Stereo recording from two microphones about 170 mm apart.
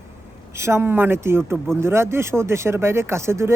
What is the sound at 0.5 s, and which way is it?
Speech, 15° right (ahead or behind).